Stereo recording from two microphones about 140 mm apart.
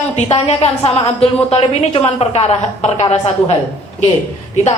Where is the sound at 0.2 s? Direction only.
50° left (ahead or behind).